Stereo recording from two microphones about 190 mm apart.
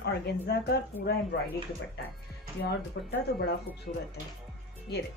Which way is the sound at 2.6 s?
60° left (ahead or behind).